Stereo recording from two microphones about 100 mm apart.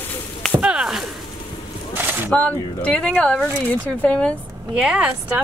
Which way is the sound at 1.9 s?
20° right (ahead or behind).